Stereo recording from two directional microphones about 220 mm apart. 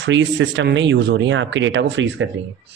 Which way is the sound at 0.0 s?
55° right (ahead or behind).